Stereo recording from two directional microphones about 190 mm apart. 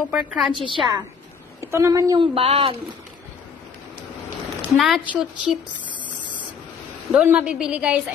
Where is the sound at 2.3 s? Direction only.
30° right (ahead or behind).